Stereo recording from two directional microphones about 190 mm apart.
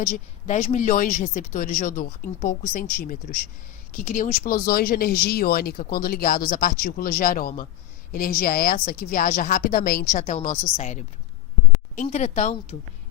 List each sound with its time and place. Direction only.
0.0 s speech: 45° left (ahead or behind)